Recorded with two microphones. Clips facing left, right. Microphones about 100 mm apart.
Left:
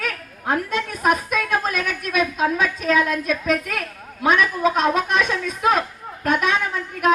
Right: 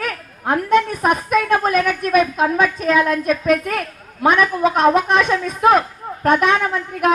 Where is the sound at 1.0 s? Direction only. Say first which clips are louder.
Right 4 dB; 40° right (ahead or behind).